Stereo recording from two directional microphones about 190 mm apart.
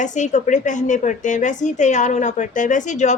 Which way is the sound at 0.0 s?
40° left (ahead or behind).